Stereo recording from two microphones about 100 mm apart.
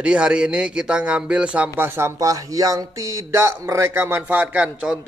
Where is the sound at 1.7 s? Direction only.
20° right (ahead or behind).